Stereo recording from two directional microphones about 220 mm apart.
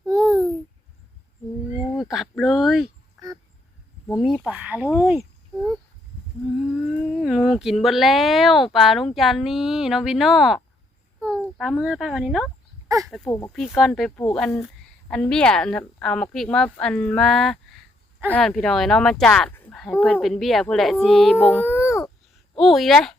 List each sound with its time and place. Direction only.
0.1 s babbling: 15° right (ahead or behind)
2.0 s speech: centre (ahead or behind)
4.2 s speech: centre (ahead or behind)
6.7 s speech: centre (ahead or behind)
12.9 s speech: 15° right (ahead or behind)
13.2 s speech: 20° left (ahead or behind)
13.5 s speech: centre (ahead or behind)
21.8 s a sound: 15° left (ahead or behind)
22.5 s speech: centre (ahead or behind)